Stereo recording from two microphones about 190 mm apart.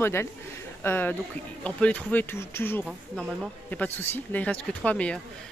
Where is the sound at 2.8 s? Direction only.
5° right (ahead or behind).